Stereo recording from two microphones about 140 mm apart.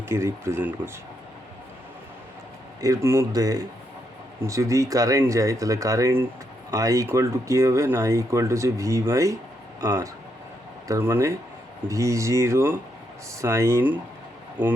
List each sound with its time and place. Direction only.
0.1 s speech: 20° right (ahead or behind)
2.8 s speech: 20° right (ahead or behind)
10.8 s speech: 20° right (ahead or behind)